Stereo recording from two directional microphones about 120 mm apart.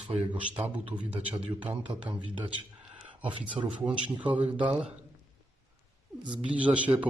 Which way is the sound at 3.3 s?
45° right (ahead or behind).